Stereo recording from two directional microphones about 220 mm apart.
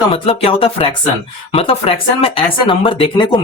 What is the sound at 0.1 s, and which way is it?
Speech, 25° left (ahead or behind).